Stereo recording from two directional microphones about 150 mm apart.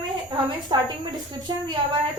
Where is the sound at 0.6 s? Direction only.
30° right (ahead or behind).